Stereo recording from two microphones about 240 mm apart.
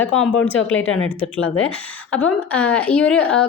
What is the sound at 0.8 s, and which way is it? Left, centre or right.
Speech, left.